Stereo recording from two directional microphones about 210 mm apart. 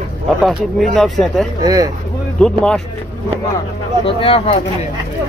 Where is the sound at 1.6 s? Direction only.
15° right (ahead or behind).